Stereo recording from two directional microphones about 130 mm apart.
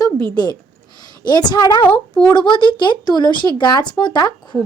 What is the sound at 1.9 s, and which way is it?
Speech, 10° left (ahead or behind).